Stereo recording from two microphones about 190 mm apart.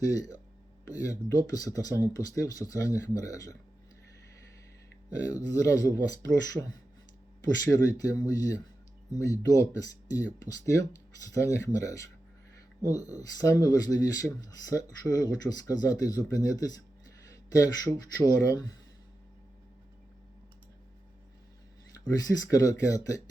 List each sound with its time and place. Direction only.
0.0 s speech: 20° left (ahead or behind)
5.2 s speech: 20° left (ahead or behind)
22.0 s speech: 20° left (ahead or behind)